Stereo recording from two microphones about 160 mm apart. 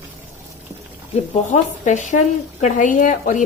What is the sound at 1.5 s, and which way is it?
A woman's voice, 45° left (ahead or behind).